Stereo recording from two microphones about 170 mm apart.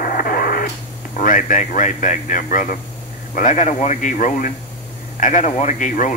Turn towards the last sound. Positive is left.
turn(degrees=50)  # may be behind; listen again after turning